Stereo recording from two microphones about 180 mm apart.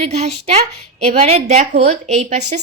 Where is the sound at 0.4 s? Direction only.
35° right (ahead or behind).